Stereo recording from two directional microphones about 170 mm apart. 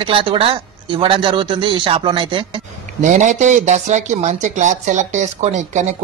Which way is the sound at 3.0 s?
45° right (ahead or behind).